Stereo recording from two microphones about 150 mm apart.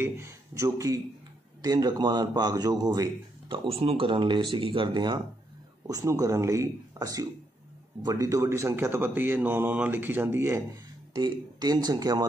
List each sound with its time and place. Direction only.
0.0 s a man's voice: 20° right (ahead or behind)
11.1 s a man's voice: 25° right (ahead or behind)